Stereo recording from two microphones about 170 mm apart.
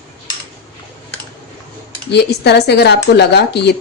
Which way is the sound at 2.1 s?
75° left (ahead or behind).